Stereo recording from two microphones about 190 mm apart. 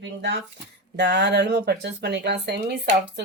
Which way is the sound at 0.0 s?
65° right (ahead or behind).